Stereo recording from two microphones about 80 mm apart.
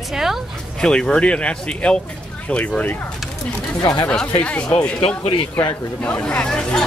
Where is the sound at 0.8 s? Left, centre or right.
Centre.